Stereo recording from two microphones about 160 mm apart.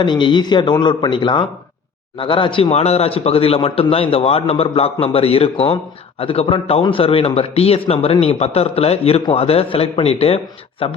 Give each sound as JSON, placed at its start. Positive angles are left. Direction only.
{"t": 0.0, "sound": "a man's voice", "side_deg": 30}